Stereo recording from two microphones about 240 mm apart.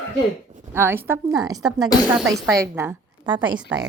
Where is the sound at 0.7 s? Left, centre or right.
Centre.